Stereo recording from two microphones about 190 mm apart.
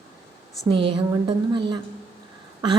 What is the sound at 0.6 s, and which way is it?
A woman's voice, 25° right (ahead or behind).